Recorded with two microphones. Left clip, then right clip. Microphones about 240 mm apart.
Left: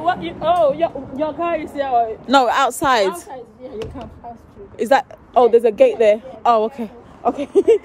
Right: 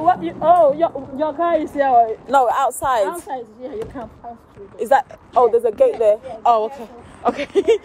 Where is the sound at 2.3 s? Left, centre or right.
Left.